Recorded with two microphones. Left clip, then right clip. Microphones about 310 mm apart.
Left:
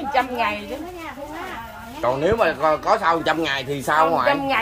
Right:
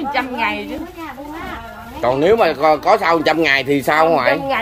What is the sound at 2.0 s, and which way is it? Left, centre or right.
Speech, right.